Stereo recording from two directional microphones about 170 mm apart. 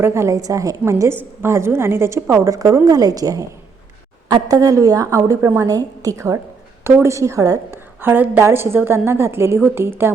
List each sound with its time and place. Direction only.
0.0 s a woman's voice: 15° right (ahead or behind)
4.4 s a woman's voice: 20° right (ahead or behind)